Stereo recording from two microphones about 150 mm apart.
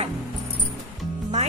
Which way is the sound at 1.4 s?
50° right (ahead or behind).